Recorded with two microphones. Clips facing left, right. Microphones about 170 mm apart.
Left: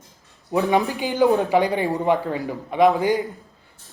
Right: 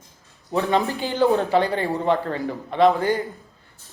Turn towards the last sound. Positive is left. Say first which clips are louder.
# left 1 dB
turn(degrees=15)  # may be behind; listen again after turning